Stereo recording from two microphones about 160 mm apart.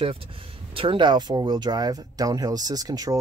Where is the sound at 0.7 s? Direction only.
30° right (ahead or behind).